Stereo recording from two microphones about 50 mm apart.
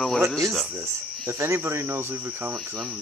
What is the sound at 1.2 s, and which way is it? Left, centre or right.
Speech, right.